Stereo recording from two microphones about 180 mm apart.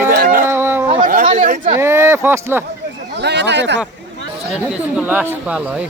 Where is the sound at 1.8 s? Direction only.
15° right (ahead or behind).